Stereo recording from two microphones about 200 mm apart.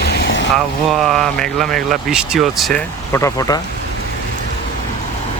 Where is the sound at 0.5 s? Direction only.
Centre (ahead or behind); by 3.6 s 20° left (ahead or behind).